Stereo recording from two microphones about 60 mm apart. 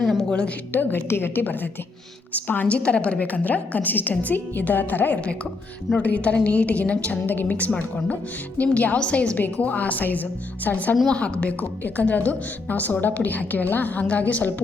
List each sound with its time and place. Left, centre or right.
0.0 s a sound: centre
0.3 s a woman's voice: centre
0.7 s a woman's voice: left